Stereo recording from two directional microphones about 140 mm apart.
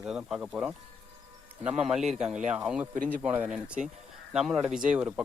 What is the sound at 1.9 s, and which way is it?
Speech, 5° right (ahead or behind).